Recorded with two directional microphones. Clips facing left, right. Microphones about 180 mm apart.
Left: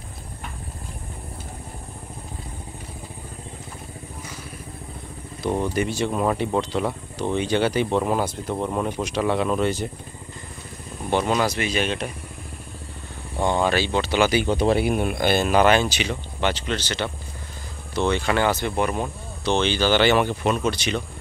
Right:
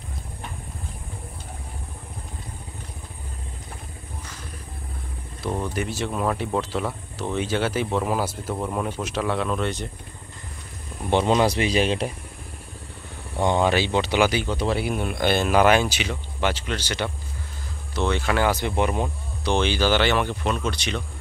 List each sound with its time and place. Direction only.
5.6 s speech: centre (ahead or behind)
11.1 s speech: 25° right (ahead or behind)
13.4 s speech: 20° right (ahead or behind)
14.8 s speech: 15° left (ahead or behind); by 18.6 s 5° right (ahead or behind)
18.6 s speech: 15° right (ahead or behind); by 21.0 s 5° left (ahead or behind)